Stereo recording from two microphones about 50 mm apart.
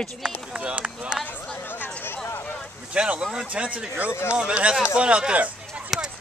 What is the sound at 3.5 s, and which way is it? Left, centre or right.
Speech, right.